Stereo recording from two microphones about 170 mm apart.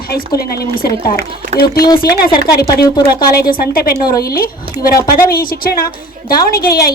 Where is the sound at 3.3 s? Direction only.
60° left (ahead or behind).